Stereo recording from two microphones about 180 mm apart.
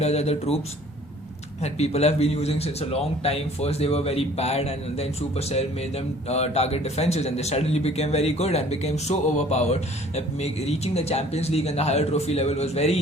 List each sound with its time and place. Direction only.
0.0 s a man's voice: 35° left (ahead or behind)
1.6 s a man's voice: 35° left (ahead or behind)